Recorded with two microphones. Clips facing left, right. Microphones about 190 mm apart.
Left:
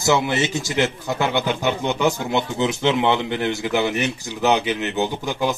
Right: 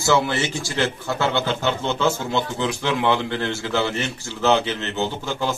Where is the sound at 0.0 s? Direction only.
20° left (ahead or behind).